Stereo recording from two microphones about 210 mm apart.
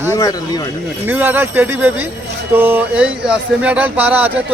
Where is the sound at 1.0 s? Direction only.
10° right (ahead or behind).